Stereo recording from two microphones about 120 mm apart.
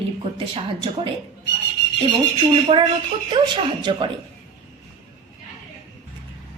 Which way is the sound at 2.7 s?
50° right (ahead or behind).